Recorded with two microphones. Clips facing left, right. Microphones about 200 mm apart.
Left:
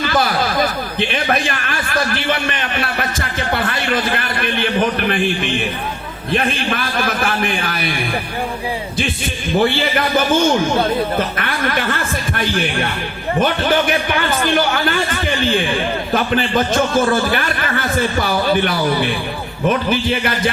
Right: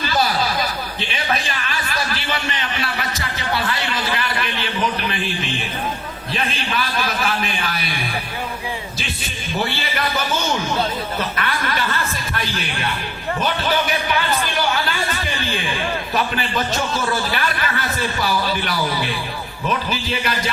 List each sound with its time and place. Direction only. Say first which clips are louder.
0.0 s a man's voice: left 3 dB; 50° left (ahead or behind)
9.6 s a man's voice: left 8 dB; 50° left (ahead or behind)
11.3 s a man's voice: left 3 dB; 50° left (ahead or behind)
13.4 s a man's voice: left 5 dB; 50° left (ahead or behind)